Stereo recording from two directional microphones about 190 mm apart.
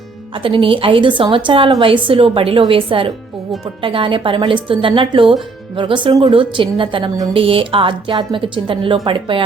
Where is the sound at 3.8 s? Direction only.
25° right (ahead or behind).